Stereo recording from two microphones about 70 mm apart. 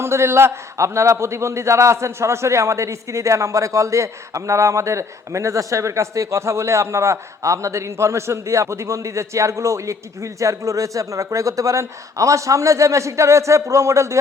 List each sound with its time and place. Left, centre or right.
0.0 s a man's voice: right